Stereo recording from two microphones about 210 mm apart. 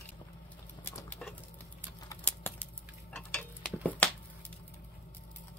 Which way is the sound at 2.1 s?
10° left (ahead or behind).